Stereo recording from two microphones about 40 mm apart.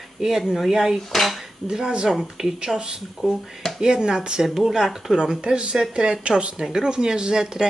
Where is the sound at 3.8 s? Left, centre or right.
Centre.